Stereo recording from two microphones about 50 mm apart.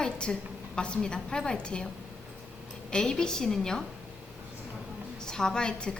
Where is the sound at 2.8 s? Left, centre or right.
Centre.